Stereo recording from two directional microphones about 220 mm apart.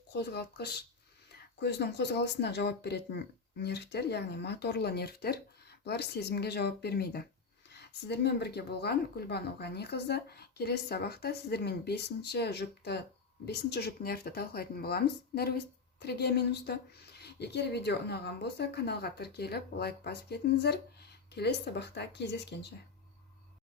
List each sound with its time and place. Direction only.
0.1 s speech: 50° left (ahead or behind)